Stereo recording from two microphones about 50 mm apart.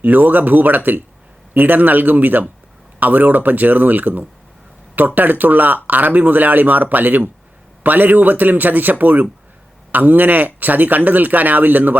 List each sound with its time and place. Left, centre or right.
0.0 s speech: right